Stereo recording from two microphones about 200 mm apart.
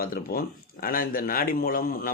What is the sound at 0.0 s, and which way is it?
Speech, 45° left (ahead or behind).